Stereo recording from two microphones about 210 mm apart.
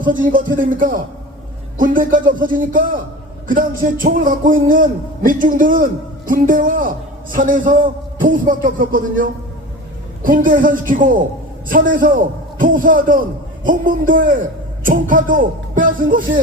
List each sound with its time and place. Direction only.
0.0 s a man's voice: 40° right (ahead or behind)
10.2 s a man's voice: 40° right (ahead or behind)